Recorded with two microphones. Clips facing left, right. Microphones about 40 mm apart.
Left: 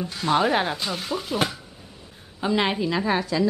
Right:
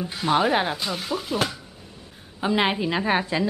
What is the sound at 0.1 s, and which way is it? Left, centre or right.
Speech, centre.